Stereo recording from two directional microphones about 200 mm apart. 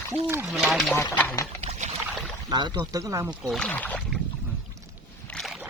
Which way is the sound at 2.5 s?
20° right (ahead or behind).